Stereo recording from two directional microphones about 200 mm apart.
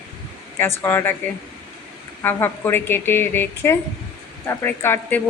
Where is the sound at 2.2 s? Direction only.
10° left (ahead or behind).